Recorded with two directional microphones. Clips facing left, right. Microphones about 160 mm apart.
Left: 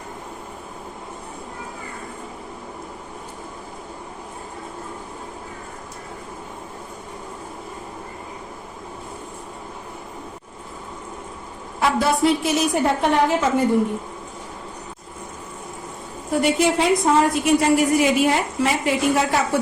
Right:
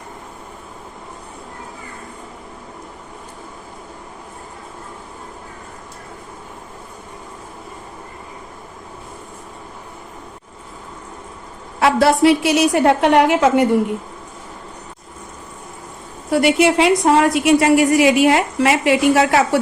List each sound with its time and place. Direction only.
11.8 s a woman's voice: 80° right
16.3 s a woman's voice: 80° right